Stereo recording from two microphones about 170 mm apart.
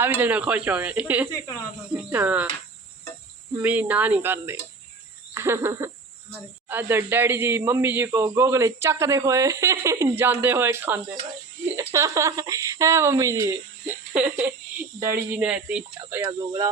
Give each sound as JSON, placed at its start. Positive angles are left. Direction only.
{"t": 0.2, "sound": "a man's voice", "side_deg": -10}
{"t": 3.6, "sound": "a man's voice", "side_deg": -10}
{"t": 5.3, "sound": "a sound", "side_deg": -15}
{"t": 6.7, "sound": "a man's voice", "side_deg": -10}